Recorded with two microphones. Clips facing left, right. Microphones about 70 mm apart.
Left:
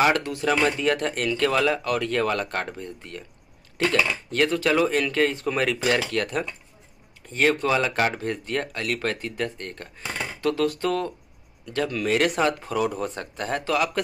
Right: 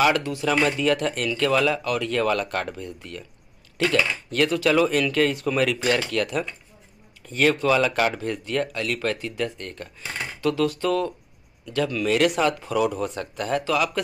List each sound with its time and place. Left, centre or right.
0.0 s speech: left